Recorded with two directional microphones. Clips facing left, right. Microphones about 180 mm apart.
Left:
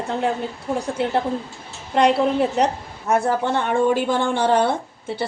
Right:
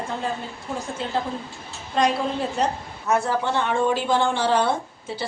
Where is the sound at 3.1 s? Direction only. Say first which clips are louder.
Left 3 dB; 50° left (ahead or behind).